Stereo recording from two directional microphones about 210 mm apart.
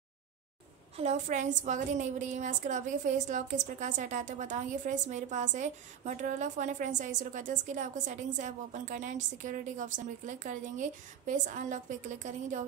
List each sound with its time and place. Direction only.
0.9 s a woman's voice: 35° right (ahead or behind)